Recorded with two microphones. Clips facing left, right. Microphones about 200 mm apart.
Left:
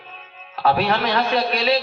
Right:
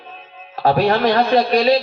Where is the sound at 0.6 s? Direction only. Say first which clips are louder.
Right 5 dB; 40° right (ahead or behind).